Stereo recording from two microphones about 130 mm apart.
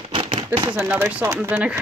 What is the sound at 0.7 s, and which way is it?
A woman's voice, 15° right (ahead or behind).